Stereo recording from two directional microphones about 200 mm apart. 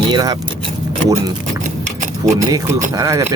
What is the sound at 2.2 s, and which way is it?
Speech, 15° right (ahead or behind).